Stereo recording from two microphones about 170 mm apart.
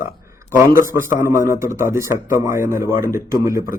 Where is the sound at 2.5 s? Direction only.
55° left (ahead or behind).